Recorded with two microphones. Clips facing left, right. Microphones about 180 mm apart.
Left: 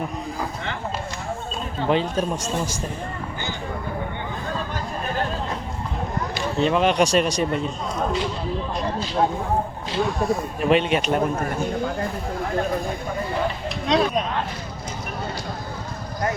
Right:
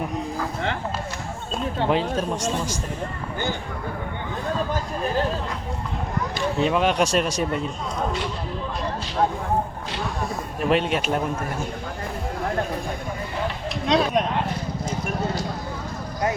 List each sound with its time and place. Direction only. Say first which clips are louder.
1.9 s speech: left 3 dB; centre (ahead or behind)
6.6 s speech: left 2 dB; 5° right (ahead or behind)
10.6 s speech: left 1 dB; centre (ahead or behind)
13.8 s speech: left 1 dB; centre (ahead or behind)